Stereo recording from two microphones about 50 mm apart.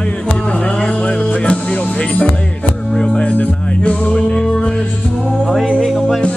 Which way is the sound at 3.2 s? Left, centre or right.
Left.